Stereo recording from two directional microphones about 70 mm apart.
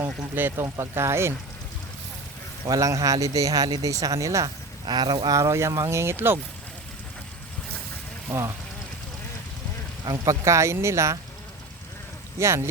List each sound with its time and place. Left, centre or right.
0.3 s speech: right
0.6 s speech: right
2.6 s speech: right
4.4 s speech: right
8.3 s speech: right
10.1 s speech: right
12.4 s speech: right